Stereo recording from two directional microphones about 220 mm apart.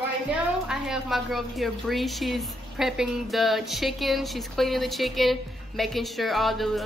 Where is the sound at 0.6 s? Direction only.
Centre (ahead or behind).